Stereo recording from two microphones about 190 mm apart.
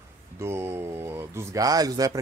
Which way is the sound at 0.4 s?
15° right (ahead or behind).